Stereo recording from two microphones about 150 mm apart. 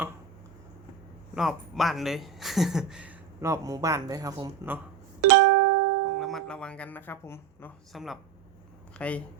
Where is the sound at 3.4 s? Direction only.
20° right (ahead or behind).